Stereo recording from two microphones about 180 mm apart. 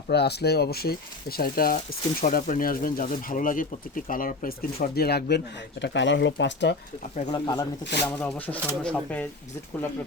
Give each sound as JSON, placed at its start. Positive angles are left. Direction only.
{"t": 0.1, "sound": "speech", "side_deg": 65}
{"t": 5.8, "sound": "speech", "side_deg": 80}
{"t": 7.3, "sound": "speech", "side_deg": 25}
{"t": 8.2, "sound": "speech", "side_deg": 10}